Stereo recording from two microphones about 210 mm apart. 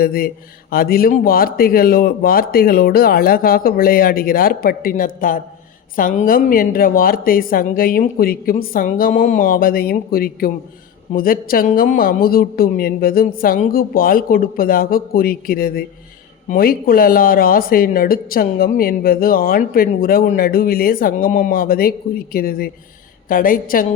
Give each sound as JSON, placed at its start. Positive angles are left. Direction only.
{"t": 0.0, "sound": "a woman's voice", "side_deg": 45}